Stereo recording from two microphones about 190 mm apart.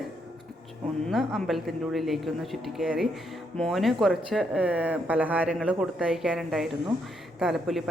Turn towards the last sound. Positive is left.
turn(degrees=0)  # may be behind; listen again after turning